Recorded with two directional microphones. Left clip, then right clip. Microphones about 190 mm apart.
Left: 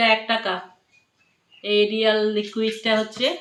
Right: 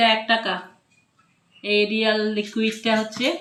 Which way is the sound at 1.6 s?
25° left (ahead or behind).